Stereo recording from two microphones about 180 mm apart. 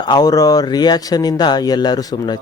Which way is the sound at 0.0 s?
25° left (ahead or behind).